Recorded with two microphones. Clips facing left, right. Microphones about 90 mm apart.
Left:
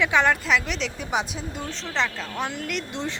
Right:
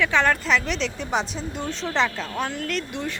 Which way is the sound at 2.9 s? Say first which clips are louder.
Even; 20° left (ahead or behind).